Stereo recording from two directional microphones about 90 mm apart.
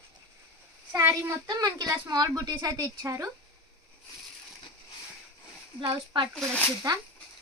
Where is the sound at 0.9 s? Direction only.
25° right (ahead or behind).